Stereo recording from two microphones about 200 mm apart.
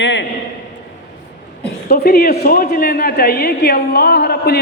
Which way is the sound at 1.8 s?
50° left (ahead or behind).